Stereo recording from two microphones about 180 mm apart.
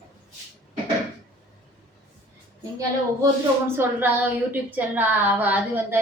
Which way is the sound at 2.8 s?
15° right (ahead or behind).